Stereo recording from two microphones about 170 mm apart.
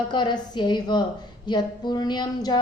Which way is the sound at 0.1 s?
25° left (ahead or behind).